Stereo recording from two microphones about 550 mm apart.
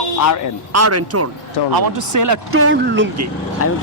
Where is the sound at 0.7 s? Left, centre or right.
Right.